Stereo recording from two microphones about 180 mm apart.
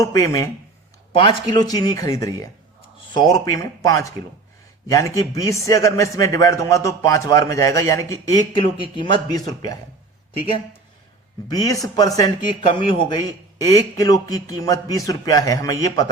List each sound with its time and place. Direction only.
0.0 s a man's voice: 20° left (ahead or behind)
11.4 s a man's voice: 20° left (ahead or behind)